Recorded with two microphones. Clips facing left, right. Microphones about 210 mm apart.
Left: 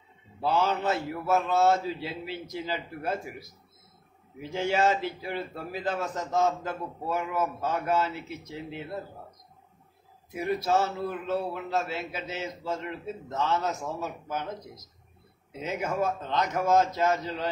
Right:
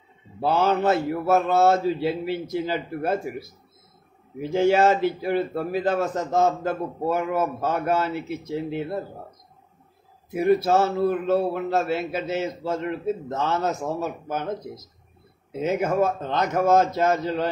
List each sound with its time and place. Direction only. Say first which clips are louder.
0.4 s a man's voice: right 5 dB; 55° right (ahead or behind)
4.4 s a man's voice: right 8 dB; 55° right (ahead or behind)
10.3 s a man's voice: right 7 dB; 60° right (ahead or behind)